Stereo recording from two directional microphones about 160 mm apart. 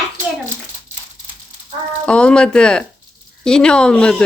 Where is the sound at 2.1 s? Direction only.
5° left (ahead or behind).